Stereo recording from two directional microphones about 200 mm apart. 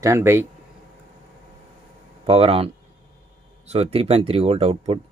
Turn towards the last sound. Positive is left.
turn(degrees=-30)  # may be behind; listen again after turning